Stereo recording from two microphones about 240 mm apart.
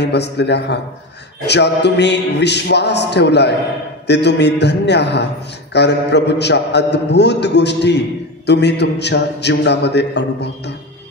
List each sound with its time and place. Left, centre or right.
0.0 s a man's voice: left